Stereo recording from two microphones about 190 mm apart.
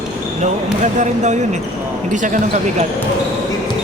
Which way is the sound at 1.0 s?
40° right (ahead or behind).